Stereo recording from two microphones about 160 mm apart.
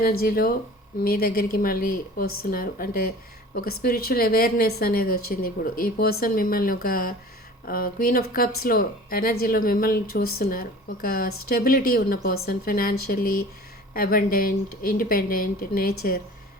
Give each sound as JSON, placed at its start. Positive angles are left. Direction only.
{"t": 0.0, "sound": "speech", "side_deg": 65}